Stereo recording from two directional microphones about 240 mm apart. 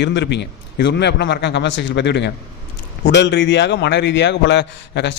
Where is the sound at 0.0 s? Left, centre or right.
Left.